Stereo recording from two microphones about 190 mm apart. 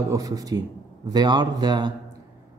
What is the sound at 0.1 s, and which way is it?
Speech, 20° right (ahead or behind).